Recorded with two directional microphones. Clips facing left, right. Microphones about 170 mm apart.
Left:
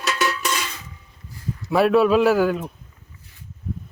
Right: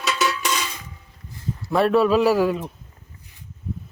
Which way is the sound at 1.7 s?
Centre (ahead or behind).